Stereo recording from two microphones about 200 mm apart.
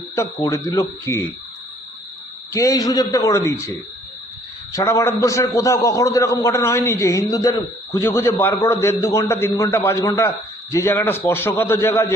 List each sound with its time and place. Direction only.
0.2 s a man's voice: 15° left (ahead or behind)
2.5 s a man's voice: 15° left (ahead or behind)